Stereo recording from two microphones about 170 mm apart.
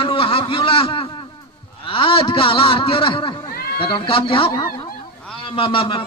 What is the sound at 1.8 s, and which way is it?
A man's voice, 30° left (ahead or behind).